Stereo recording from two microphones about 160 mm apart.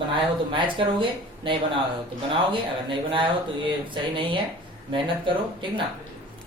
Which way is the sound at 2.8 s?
30° right (ahead or behind).